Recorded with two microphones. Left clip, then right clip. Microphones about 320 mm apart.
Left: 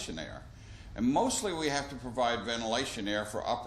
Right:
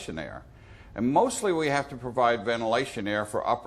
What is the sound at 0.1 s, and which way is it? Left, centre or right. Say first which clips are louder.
A man's voice: right 5 dB; right.